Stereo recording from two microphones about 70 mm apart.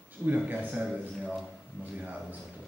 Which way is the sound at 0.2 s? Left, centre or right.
Right.